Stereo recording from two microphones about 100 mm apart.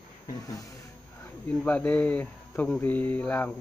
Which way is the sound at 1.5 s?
10° left (ahead or behind).